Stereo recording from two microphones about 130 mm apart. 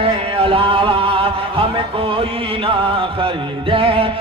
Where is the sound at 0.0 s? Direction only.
45° right (ahead or behind).